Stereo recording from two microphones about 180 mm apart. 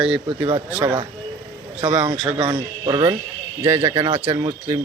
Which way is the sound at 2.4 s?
20° right (ahead or behind).